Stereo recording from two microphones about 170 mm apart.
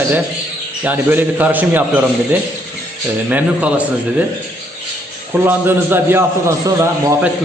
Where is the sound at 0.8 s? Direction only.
10° right (ahead or behind).